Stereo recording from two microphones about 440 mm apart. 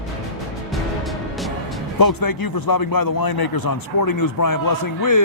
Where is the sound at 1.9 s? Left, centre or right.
Left.